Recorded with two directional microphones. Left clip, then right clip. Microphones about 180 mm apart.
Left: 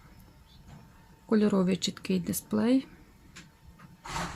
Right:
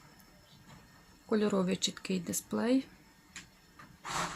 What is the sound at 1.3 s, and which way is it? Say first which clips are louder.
Speech: left 4 dB; 10° left (ahead or behind).